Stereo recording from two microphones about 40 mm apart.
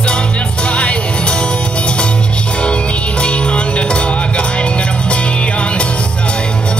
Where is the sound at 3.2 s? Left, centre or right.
Left.